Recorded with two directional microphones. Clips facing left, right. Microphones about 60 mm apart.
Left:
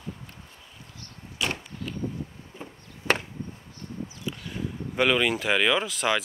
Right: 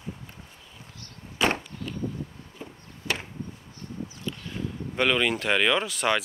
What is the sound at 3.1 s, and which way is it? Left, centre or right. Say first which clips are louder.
Chop: left 6 dB; left.